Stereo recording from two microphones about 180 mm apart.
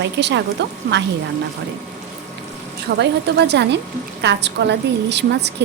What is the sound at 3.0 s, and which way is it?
A woman's voice, 70° right (ahead or behind).